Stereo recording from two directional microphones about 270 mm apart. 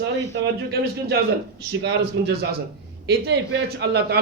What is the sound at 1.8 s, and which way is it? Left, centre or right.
A man's voice, right.